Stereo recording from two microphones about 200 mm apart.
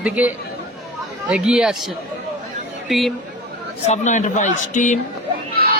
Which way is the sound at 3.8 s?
35° left (ahead or behind).